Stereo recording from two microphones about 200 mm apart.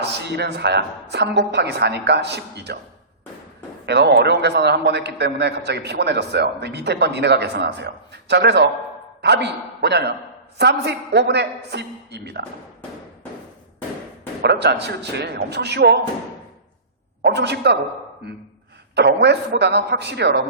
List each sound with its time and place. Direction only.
0.0 s a man's voice: 55° right (ahead or behind)
3.8 s a man's voice: 55° right (ahead or behind)
14.4 s a man's voice: 55° right (ahead or behind)
17.3 s a man's voice: 60° right (ahead or behind)